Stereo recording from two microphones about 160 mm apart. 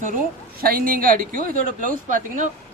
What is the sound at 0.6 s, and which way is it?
Speech, 65° right (ahead or behind).